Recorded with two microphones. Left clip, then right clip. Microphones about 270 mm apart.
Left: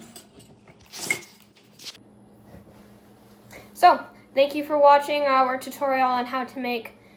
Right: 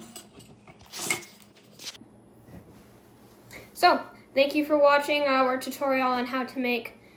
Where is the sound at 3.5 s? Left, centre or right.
Centre.